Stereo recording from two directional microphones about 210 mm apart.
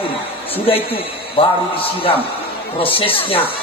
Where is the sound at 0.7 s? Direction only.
25° left (ahead or behind).